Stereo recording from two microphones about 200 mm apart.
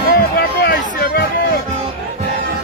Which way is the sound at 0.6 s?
50° left (ahead or behind).